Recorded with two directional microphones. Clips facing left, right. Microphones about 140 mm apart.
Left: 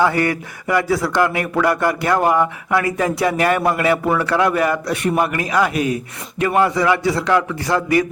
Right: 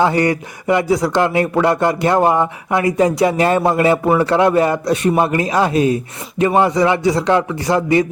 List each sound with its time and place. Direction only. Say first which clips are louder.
0.0 s a man's voice: right 2 dB; 20° right (ahead or behind)